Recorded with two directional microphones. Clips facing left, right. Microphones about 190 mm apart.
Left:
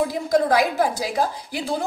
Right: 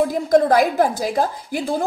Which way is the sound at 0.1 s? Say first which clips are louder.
Right 4 dB; 50° right (ahead or behind).